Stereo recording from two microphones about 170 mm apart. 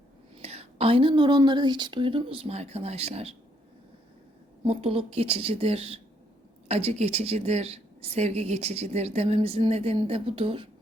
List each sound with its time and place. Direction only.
0.4 s a woman's voice: 35° right (ahead or behind)
4.6 s a woman's voice: 35° right (ahead or behind)